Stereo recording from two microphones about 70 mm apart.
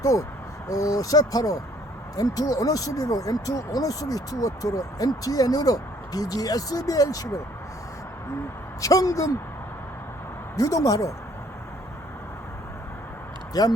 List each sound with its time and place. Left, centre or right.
0.0 s speech: left
8.8 s speech: left
10.5 s speech: left
13.5 s speech: left